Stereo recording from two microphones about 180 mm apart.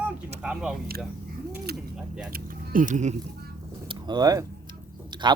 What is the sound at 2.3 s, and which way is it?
Speech, 50° right (ahead or behind).